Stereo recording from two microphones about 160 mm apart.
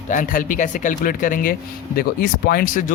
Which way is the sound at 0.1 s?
55° left (ahead or behind).